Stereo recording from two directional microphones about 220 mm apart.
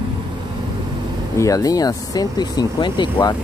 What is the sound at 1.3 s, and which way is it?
Speech, 15° left (ahead or behind).